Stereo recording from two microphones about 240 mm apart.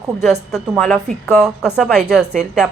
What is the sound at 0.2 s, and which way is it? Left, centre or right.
A woman's voice, centre.